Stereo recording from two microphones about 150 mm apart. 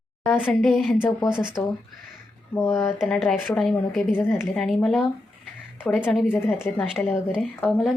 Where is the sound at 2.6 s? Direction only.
20° left (ahead or behind).